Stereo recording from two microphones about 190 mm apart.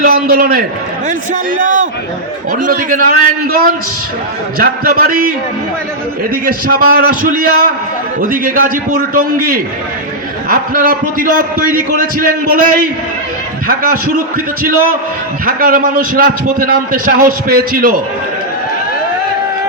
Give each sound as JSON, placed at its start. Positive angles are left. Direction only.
{"t": 0.0, "sound": "a man's voice", "side_deg": -50}
{"t": 4.5, "sound": "a man's voice", "side_deg": -50}
{"t": 6.3, "sound": "a man's voice", "side_deg": -50}